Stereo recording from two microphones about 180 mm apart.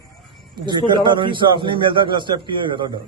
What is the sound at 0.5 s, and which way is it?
A man's voice, 25° right (ahead or behind).